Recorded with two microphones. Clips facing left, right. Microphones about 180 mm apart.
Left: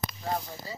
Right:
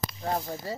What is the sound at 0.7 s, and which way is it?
Speech, 65° right (ahead or behind).